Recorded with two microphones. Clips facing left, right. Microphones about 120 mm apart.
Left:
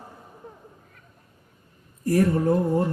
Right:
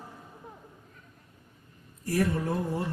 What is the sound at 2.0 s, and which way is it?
Speech, 45° left (ahead or behind).